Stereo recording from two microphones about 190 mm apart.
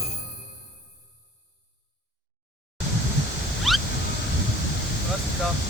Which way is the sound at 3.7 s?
Centre (ahead or behind).